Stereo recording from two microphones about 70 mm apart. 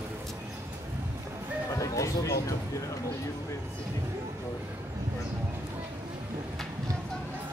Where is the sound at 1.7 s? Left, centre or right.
Left.